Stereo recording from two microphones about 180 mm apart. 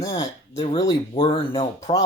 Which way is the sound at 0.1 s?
30° left (ahead or behind).